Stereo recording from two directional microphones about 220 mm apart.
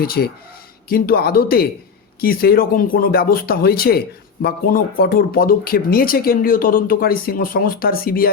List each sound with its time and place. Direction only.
0.0 s speech: 45° left (ahead or behind)